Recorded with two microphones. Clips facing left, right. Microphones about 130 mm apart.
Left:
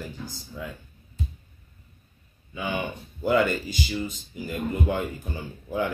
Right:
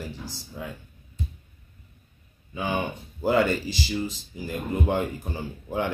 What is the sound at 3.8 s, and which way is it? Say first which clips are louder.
Speech: right 1 dB; 35° right (ahead or behind).